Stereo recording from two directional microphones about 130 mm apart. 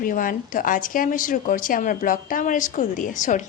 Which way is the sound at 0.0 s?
90° left.